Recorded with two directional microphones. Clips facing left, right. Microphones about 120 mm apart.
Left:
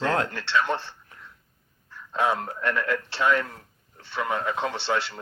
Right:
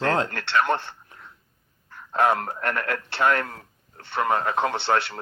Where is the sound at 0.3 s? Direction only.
60° right (ahead or behind).